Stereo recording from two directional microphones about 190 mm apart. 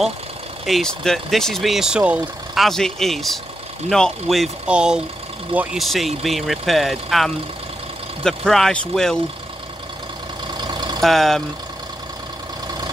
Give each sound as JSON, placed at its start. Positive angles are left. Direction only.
{"t": 0.7, "sound": "speech", "side_deg": 0}
{"t": 10.6, "sound": "vehicle", "side_deg": -20}
{"t": 11.0, "sound": "speech", "side_deg": 0}